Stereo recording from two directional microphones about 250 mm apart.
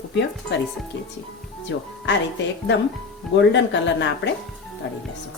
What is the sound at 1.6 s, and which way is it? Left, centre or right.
Speech, left.